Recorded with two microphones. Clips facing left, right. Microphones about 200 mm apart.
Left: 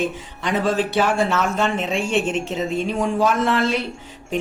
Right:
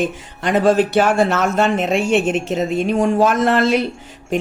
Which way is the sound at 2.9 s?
45° right (ahead or behind).